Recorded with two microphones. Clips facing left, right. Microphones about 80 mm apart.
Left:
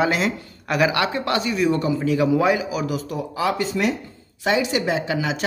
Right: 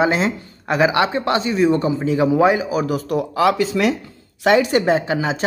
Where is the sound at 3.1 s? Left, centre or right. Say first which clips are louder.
Right 6 dB; right.